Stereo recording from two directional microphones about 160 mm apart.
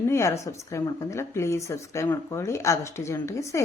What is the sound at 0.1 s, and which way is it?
Speech, 20° left (ahead or behind).